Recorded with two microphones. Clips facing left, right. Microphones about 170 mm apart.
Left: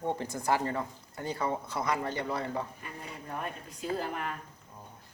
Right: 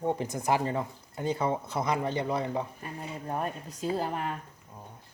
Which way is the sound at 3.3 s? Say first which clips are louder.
Right 5 dB; 40° right (ahead or behind).